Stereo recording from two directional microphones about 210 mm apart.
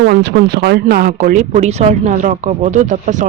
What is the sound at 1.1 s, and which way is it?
Speech, 40° right (ahead or behind).